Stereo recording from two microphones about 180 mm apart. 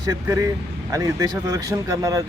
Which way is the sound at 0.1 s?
15° right (ahead or behind).